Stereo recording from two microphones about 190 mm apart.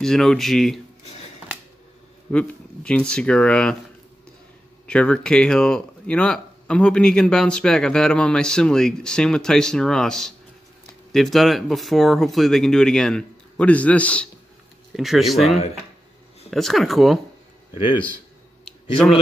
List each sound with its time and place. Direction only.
0.0 s speech: centre (ahead or behind)
2.3 s speech: 5° left (ahead or behind)
4.8 s speech: 5° left (ahead or behind)
17.7 s speech: 25° left (ahead or behind)
18.7 s a sound: centre (ahead or behind)